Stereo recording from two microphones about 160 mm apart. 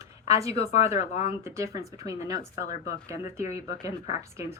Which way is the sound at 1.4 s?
20° right (ahead or behind).